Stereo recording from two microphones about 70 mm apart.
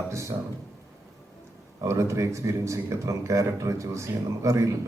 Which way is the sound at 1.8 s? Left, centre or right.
Right.